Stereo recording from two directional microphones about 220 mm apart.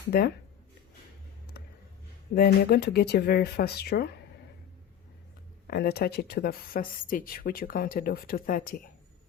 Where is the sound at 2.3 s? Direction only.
45° left (ahead or behind).